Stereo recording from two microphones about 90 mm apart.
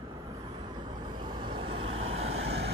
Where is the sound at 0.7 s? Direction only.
55° right (ahead or behind); by 2.0 s 90° right.